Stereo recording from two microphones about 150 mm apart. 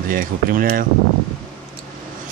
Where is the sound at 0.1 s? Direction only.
70° right (ahead or behind).